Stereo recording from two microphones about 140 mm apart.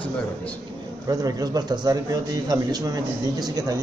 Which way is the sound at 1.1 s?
25° right (ahead or behind).